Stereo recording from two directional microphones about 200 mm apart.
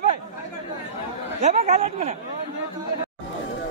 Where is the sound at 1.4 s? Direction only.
35° right (ahead or behind).